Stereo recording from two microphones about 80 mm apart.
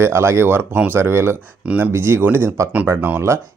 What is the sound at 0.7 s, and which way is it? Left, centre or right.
Speech, centre.